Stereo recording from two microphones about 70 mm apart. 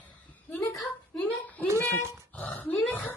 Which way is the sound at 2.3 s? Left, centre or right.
Left.